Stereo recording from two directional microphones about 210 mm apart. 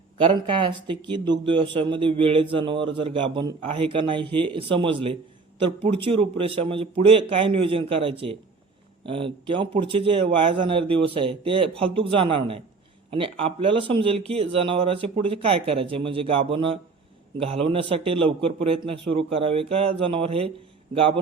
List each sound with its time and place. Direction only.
0.3 s speech: 25° right (ahead or behind)